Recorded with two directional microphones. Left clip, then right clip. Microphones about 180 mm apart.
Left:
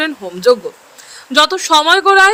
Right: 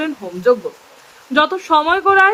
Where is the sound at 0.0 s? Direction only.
35° left (ahead or behind).